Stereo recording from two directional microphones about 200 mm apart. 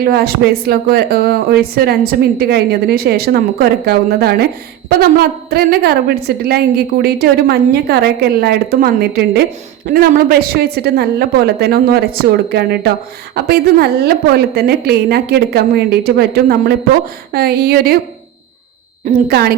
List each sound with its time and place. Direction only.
0.0 s speech: 50° right (ahead or behind)
5.5 s speech: 50° right (ahead or behind)
19.1 s a woman's voice: 40° right (ahead or behind)